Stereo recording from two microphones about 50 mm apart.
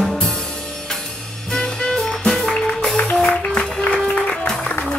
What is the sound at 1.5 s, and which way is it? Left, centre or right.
Music, centre.